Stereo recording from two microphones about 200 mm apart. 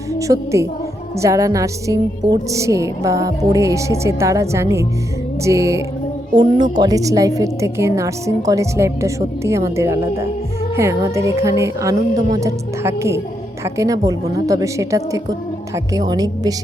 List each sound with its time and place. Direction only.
0.1 s a woman's voice: 15° right (ahead or behind)